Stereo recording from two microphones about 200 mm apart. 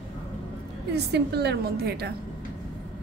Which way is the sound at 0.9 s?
55° right (ahead or behind).